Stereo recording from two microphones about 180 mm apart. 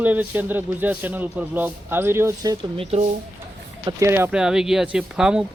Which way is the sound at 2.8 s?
35° right (ahead or behind).